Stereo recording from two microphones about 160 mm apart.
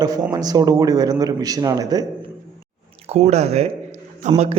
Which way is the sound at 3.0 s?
45° right (ahead or behind).